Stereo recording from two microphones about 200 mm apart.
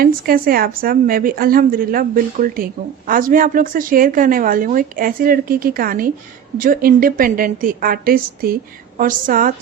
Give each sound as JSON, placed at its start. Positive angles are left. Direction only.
{"t": 0.0, "sound": "a woman's voice", "side_deg": -45}